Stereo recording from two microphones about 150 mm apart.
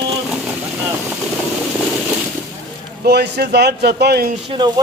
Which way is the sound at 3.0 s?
90° right.